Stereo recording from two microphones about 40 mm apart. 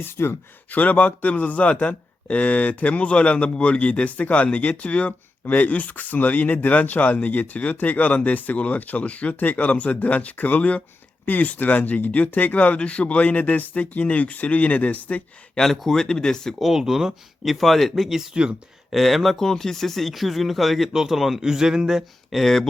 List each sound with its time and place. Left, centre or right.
0.0 s speech: left
0.7 s speech: left
15.5 s speech: centre
16.6 s speech: centre
20.9 s speech: centre
22.3 s speech: centre